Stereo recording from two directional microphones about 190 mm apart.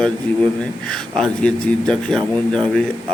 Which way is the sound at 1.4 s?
5° left (ahead or behind).